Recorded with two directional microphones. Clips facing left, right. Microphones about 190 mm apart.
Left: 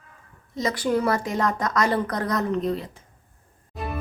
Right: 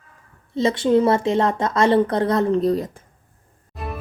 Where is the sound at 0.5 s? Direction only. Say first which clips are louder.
Right 6 dB; 25° right (ahead or behind).